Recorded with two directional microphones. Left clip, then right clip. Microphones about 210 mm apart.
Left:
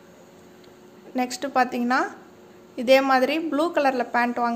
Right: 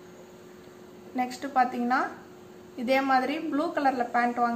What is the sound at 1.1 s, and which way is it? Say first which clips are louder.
A woman's voice: left 3 dB; 50° left (ahead or behind).